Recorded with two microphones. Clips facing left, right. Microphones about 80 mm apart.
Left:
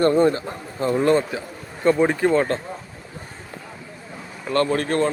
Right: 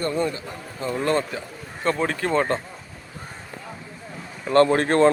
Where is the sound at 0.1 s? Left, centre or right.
Left.